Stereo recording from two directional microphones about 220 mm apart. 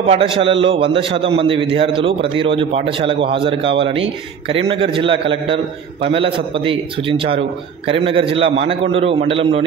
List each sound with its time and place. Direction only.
0.1 s a man's voice: 25° right (ahead or behind)